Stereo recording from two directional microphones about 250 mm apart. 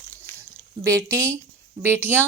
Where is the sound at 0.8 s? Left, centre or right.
Centre.